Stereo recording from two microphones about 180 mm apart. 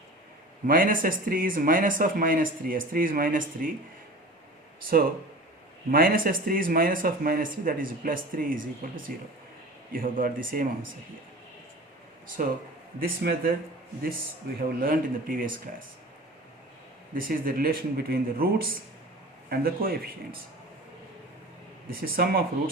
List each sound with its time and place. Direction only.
0.7 s speech: 50° right (ahead or behind)
5.9 s speech: 55° right (ahead or behind)
12.4 s speech: 50° right (ahead or behind)
14.8 s speech: 50° right (ahead or behind)
17.2 s speech: 50° right (ahead or behind)
21.8 s speech: 55° right (ahead or behind)